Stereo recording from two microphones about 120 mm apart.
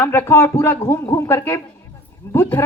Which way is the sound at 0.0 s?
20° left (ahead or behind).